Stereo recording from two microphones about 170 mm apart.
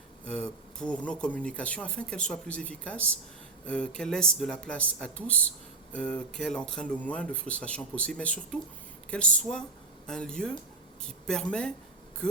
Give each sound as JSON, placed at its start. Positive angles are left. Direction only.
{"t": 0.3, "sound": "speech", "side_deg": 5}